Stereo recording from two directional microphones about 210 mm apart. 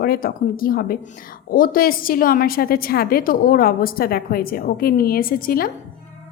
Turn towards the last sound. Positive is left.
turn(degrees=45)  # may be behind; listen again after turning